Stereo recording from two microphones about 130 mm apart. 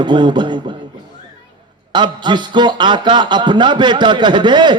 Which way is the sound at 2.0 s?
35° right (ahead or behind).